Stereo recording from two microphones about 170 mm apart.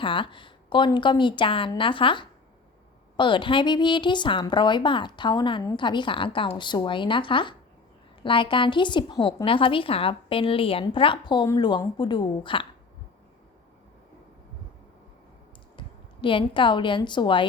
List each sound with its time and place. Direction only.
0.0 s a woman's voice: 30° left (ahead or behind)
16.2 s a woman's voice: 30° left (ahead or behind)